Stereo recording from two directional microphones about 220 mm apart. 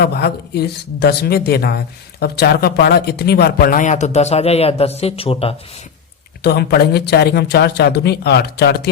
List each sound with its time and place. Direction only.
0.0 s speech: 45° left (ahead or behind); by 5.5 s 25° left (ahead or behind)
6.4 s speech: 45° left (ahead or behind)